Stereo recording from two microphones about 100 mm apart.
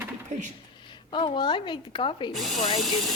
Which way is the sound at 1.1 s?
50° left (ahead or behind).